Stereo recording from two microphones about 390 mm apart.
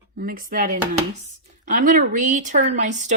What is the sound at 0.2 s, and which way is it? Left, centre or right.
Speech, right.